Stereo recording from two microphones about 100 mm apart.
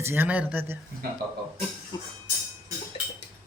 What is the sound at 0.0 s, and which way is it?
Speech, 20° right (ahead or behind).